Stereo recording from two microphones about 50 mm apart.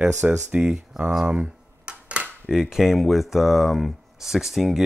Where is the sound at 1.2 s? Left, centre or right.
Right.